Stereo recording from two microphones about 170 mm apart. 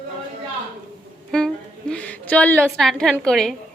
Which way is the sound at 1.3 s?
5° left (ahead or behind).